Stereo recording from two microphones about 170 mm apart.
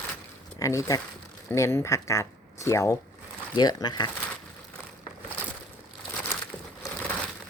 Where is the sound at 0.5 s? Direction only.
20° left (ahead or behind).